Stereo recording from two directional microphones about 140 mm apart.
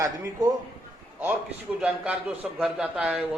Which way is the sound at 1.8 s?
10° right (ahead or behind).